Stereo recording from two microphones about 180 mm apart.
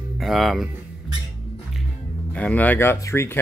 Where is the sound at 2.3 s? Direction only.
10° left (ahead or behind).